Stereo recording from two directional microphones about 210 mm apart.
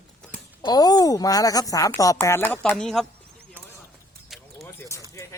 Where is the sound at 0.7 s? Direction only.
20° left (ahead or behind); by 3.1 s centre (ahead or behind).